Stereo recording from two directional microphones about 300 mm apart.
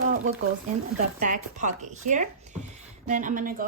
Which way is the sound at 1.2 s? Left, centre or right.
Right.